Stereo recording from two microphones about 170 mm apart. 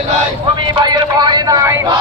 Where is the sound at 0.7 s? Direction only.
25° right (ahead or behind).